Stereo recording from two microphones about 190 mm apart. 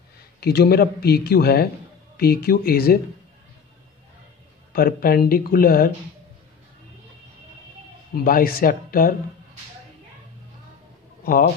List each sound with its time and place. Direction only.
0.4 s a man's voice: 60° left (ahead or behind)
4.7 s speech: 50° left (ahead or behind)
8.2 s speech: 50° left (ahead or behind)
11.2 s speech: 50° left (ahead or behind)